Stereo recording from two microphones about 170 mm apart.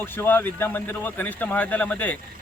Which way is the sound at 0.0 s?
10° left (ahead or behind).